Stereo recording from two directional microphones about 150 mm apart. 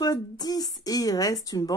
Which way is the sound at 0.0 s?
25° left (ahead or behind).